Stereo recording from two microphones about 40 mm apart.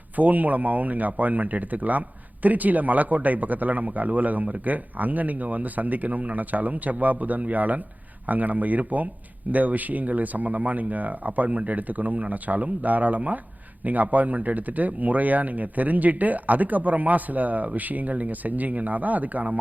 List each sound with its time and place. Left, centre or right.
0.2 s speech: right